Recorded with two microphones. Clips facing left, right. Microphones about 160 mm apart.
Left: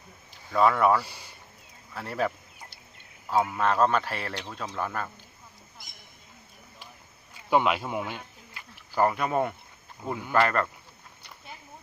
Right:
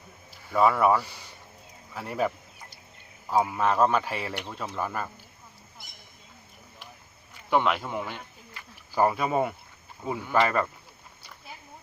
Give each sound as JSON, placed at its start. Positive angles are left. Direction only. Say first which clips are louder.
{"t": 0.5, "sound": "a man's voice", "louder": "even", "side_deg": -10}
{"t": 1.0, "sound": "speech", "louder": "even", "side_deg": 10}
{"t": 1.9, "sound": "a man's voice", "louder": "right 1 dB", "side_deg": -5}
{"t": 7.5, "sound": "speech", "louder": "left 1 dB", "side_deg": 15}
{"t": 8.9, "sound": "a man's voice", "louder": "right 1 dB", "side_deg": -10}